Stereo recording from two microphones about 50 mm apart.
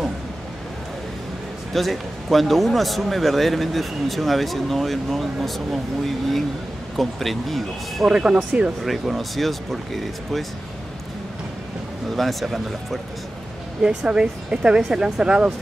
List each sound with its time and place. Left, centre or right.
1.7 s speech: centre
8.1 s speech: centre
8.8 s speech: centre
12.2 s speech: centre
13.8 s speech: centre